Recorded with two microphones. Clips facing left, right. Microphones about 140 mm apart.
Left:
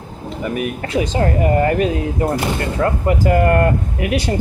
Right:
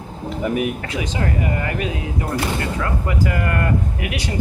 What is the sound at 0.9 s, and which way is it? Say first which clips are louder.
Speech: left 9 dB; 35° left (ahead or behind).